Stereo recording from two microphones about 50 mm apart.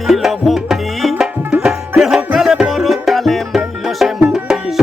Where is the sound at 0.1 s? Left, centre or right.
Centre.